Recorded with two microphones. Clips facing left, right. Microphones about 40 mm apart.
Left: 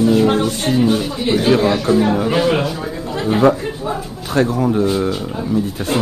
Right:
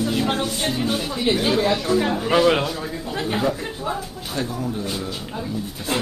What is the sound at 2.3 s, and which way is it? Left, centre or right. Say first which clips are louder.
Speech: left 1 dB; centre.